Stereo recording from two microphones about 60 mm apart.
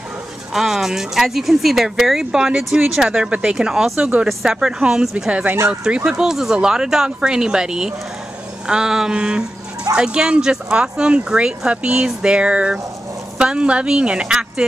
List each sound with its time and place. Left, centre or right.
0.5 s speech: centre
2.3 s speech: centre
3.1 s speech: centre